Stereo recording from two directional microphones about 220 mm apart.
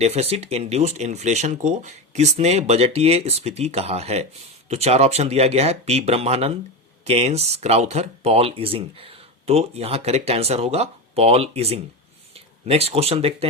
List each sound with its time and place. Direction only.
0.0 s speech: 30° right (ahead or behind)